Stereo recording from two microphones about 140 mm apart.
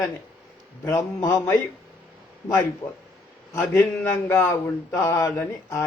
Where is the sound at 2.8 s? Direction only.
20° left (ahead or behind).